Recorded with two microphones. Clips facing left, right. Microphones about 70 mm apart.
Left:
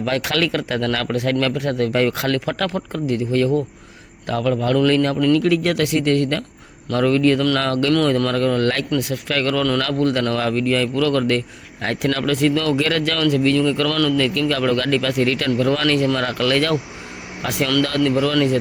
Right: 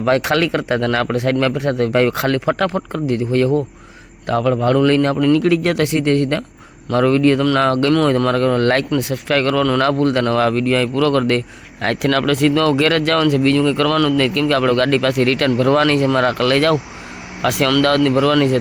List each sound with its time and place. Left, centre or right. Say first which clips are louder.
0.0 s speech: right 5 dB; right
11.9 s speech: right 4 dB; right
14.3 s speech: right 3 dB; right